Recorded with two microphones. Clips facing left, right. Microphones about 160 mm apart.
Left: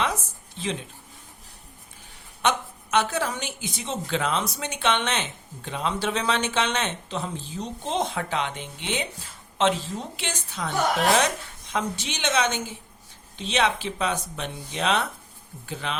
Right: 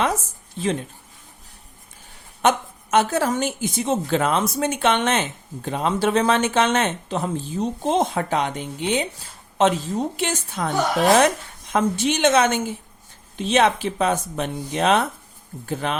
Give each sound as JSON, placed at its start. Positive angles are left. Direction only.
{"t": 0.6, "sound": "a woman's voice", "side_deg": -50}
{"t": 2.4, "sound": "a woman's voice", "side_deg": -45}
{"t": 11.7, "sound": "a woman's voice", "side_deg": -50}